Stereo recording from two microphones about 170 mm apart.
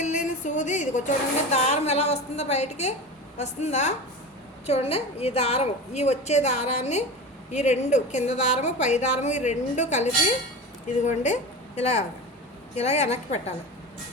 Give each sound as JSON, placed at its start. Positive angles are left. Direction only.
{"t": 0.0, "sound": "a woman's voice", "side_deg": 45}